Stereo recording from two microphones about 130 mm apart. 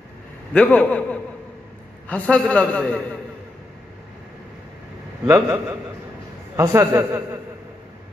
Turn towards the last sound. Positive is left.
turn(degrees=-20)  # may be behind; listen again after turning